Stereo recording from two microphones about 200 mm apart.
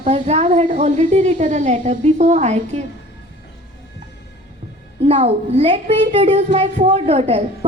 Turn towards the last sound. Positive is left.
turn(degrees=-30)  # may be behind; listen again after turning